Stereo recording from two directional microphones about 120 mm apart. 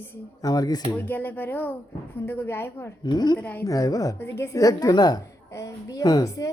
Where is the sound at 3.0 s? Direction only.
35° left (ahead or behind).